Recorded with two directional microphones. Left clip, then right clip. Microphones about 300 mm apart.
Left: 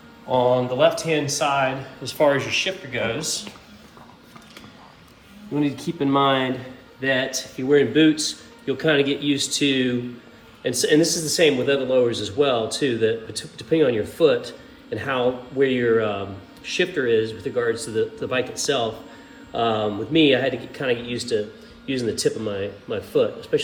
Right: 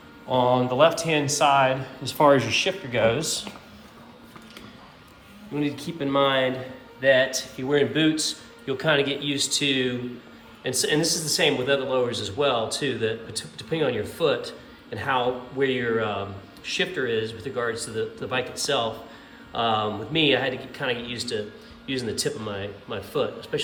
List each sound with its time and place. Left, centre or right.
0.3 s a man's voice: centre
5.5 s a man's voice: centre